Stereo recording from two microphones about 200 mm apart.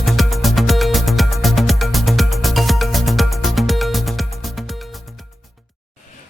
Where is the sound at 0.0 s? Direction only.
Centre (ahead or behind).